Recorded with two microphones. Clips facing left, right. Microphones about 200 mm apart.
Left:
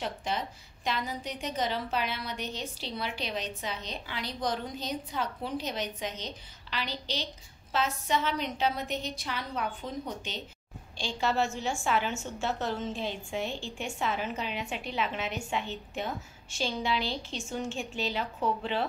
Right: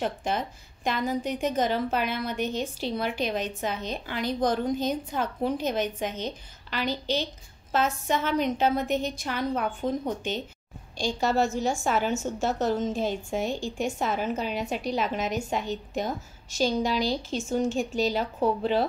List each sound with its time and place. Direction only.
0.0 s a woman's voice: 50° right (ahead or behind)